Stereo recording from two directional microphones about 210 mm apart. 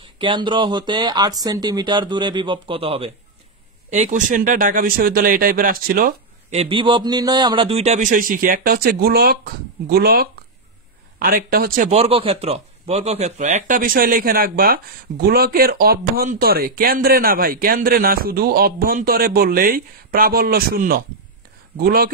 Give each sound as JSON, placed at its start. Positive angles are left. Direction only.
{"t": 0.2, "sound": "a man's voice", "side_deg": -25}
{"t": 6.6, "sound": "a man's voice", "side_deg": -25}